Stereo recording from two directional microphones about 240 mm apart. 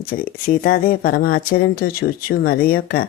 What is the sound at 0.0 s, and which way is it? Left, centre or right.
Speech, left.